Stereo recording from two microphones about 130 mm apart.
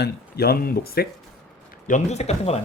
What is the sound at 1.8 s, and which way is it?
Speech, 65° left (ahead or behind).